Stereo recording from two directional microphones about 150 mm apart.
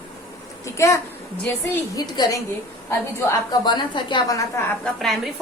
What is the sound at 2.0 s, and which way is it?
Speech, 25° left (ahead or behind).